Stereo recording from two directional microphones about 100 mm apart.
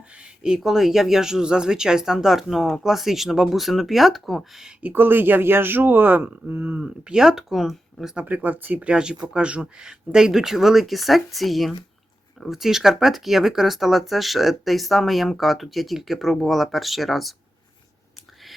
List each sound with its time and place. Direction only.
0.2 s speech: 5° right (ahead or behind)
4.8 s speech: 20° right (ahead or behind); by 8.1 s centre (ahead or behind)
8.1 s speech: 15° right (ahead or behind)